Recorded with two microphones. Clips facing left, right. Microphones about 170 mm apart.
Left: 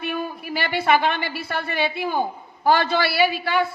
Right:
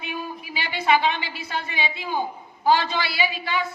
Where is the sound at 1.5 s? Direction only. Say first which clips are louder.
Left 4 dB; 55° left (ahead or behind).